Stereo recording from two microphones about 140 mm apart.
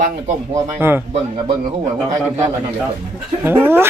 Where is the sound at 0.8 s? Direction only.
15° right (ahead or behind).